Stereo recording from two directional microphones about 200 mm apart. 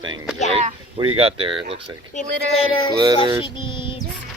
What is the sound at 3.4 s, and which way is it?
Child singing, 25° left (ahead or behind).